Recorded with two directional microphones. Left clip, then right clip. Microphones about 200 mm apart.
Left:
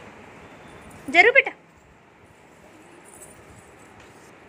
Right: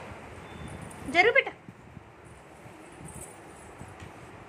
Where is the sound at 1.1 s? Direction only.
20° left (ahead or behind).